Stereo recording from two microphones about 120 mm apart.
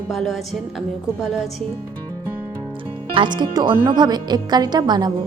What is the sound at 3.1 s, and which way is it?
A woman's voice, 40° right (ahead or behind).